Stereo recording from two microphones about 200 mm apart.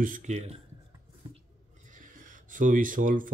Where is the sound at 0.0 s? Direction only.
40° right (ahead or behind).